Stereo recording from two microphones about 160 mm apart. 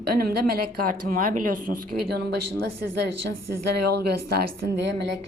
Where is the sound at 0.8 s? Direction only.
60° right (ahead or behind).